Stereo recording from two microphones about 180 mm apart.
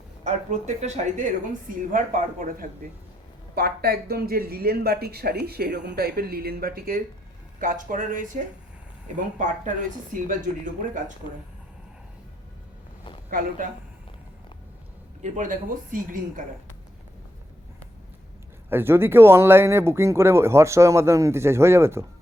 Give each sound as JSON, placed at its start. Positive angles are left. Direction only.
{"t": 0.3, "sound": "speech", "side_deg": -40}
{"t": 3.5, "sound": "speech", "side_deg": -60}
{"t": 15.2, "sound": "speech", "side_deg": -45}
{"t": 18.7, "sound": "speech", "side_deg": -10}